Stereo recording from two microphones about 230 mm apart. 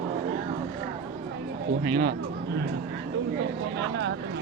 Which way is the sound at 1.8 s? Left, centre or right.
Right.